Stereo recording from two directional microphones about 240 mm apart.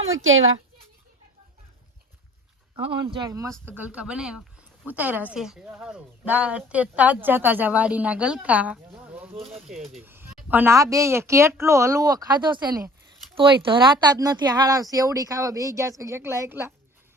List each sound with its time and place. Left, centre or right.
0.1 s speech: right
2.7 s speech: centre
9.7 s speech: right
10.0 s a sound: centre
10.5 s speech: centre